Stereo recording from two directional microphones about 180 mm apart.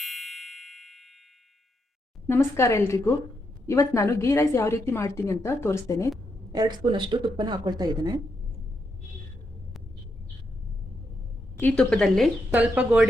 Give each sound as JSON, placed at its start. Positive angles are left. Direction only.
{"t": 0.0, "sound": "music", "side_deg": 0}
{"t": 2.2, "sound": "a woman's voice", "side_deg": 15}
{"t": 6.5, "sound": "speech", "side_deg": -25}
{"t": 11.5, "sound": "speech", "side_deg": 10}